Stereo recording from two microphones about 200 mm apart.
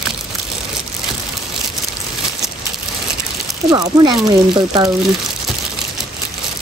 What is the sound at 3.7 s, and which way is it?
Speech, 20° right (ahead or behind).